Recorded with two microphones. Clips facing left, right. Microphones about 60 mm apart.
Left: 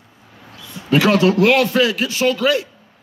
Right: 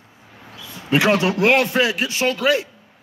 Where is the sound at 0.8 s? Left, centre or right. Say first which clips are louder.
Left 3 dB; right.